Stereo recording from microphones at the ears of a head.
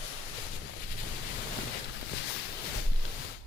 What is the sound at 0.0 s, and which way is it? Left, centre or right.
Boat, left.